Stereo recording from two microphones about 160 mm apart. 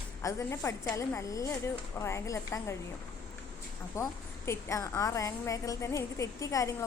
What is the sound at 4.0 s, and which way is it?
A woman's voice, 20° left (ahead or behind).